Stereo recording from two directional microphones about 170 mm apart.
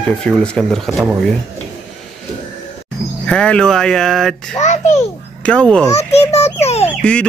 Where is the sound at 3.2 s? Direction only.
5° left (ahead or behind).